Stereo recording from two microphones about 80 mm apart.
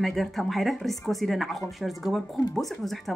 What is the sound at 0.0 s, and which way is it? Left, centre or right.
Speech, centre.